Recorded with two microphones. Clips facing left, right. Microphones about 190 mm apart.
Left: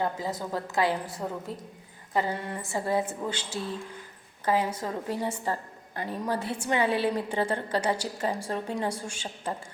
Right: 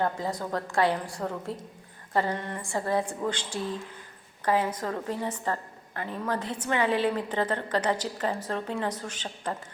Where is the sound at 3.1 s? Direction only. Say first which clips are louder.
Right 2 dB; 5° left (ahead or behind).